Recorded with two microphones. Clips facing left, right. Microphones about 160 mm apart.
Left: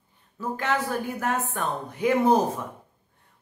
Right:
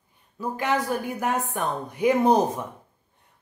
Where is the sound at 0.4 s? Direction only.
15° right (ahead or behind).